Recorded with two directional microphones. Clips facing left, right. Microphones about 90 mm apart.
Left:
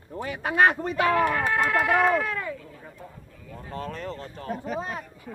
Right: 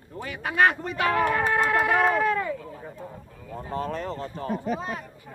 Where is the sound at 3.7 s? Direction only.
15° right (ahead or behind).